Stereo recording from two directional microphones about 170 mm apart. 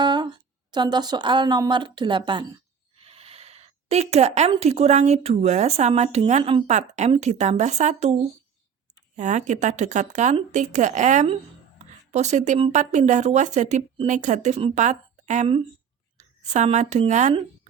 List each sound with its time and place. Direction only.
0.0 s a sound: 25° right (ahead or behind)
0.7 s a woman's voice: 25° right (ahead or behind); by 8.1 s 40° right (ahead or behind)
9.1 s a woman's voice: 45° right (ahead or behind)